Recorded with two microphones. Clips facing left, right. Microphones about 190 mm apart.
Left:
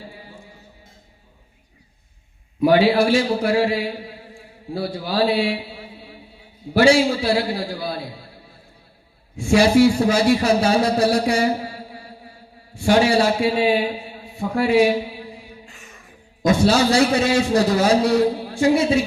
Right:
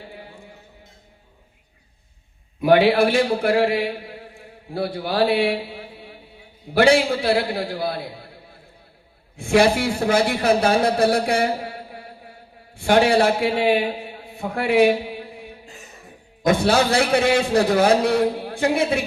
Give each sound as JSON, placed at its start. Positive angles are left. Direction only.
{"t": 2.6, "sound": "a man's voice", "side_deg": -55}
{"t": 9.3, "sound": "a man's voice", "side_deg": -55}